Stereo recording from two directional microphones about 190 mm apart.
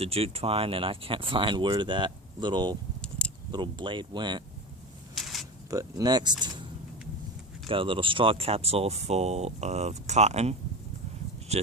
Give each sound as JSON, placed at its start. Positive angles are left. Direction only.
{"t": 0.0, "sound": "speech", "side_deg": -30}
{"t": 5.1, "sound": "a sound", "side_deg": 0}
{"t": 5.7, "sound": "speech", "side_deg": -20}
{"t": 7.7, "sound": "speech", "side_deg": -25}
{"t": 11.5, "sound": "speech", "side_deg": -35}